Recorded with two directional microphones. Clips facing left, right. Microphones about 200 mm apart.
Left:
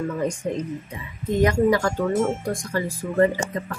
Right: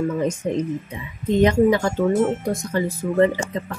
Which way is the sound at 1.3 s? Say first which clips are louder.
Right 3 dB; 25° right (ahead or behind).